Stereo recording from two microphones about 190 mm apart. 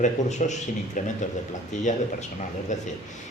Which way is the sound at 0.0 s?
40° left (ahead or behind).